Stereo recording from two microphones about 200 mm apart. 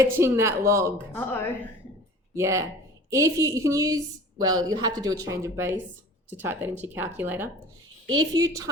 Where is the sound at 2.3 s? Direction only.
15° right (ahead or behind).